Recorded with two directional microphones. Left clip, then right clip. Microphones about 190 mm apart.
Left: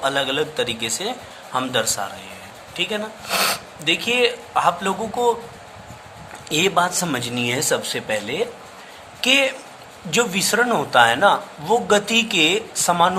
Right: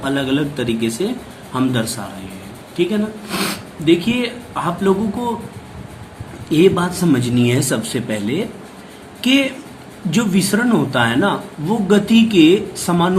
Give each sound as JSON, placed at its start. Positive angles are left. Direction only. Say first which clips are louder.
{"t": 0.0, "sound": "speech", "louder": "right 1 dB", "side_deg": 35}
{"t": 6.5, "sound": "speech", "louder": "right 4 dB", "side_deg": 40}